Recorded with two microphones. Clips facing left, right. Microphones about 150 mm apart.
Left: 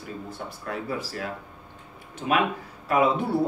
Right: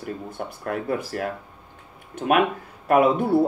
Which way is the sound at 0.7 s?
55° right (ahead or behind).